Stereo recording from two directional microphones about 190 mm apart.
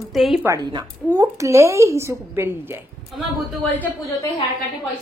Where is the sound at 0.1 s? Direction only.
Centre (ahead or behind).